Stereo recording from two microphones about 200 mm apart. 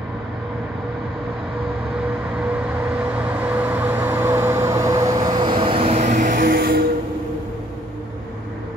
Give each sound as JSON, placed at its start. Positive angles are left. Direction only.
{"t": 3.6, "sound": "vehicle", "side_deg": -10}